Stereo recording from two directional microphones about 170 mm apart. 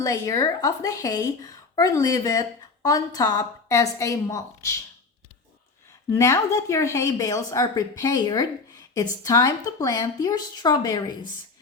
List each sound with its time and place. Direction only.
0.0 s a woman's voice: 20° left (ahead or behind)
6.1 s a woman's voice: 15° left (ahead or behind)